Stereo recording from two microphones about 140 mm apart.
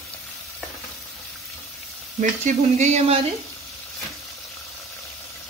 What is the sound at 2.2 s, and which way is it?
Speech, 60° right (ahead or behind).